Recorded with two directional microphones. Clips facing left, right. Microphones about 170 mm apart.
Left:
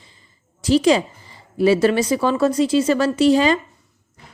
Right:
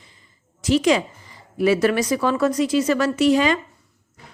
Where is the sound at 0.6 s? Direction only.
30° left (ahead or behind).